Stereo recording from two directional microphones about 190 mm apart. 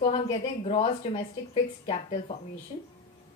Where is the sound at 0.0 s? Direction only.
30° left (ahead or behind).